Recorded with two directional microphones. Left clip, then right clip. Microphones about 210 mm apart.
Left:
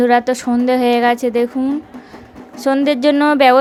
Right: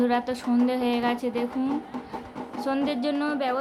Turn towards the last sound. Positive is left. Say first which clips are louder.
# left 16 dB
turn(degrees=40)  # may be behind; listen again after turning